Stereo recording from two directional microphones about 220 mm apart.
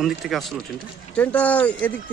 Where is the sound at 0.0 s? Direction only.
Centre (ahead or behind).